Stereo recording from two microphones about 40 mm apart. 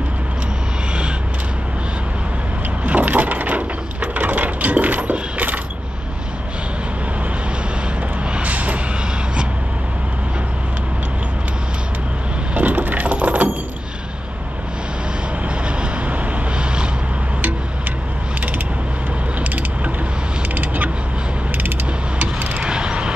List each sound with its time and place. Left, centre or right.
2.8 s a sound: right
4.1 s coin: right
8.4 s vehicle: right
12.5 s coin: right
20.5 s vehicle: right
22.6 s a sound: right